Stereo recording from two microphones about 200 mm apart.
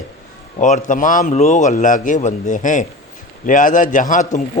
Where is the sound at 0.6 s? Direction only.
40° left (ahead or behind).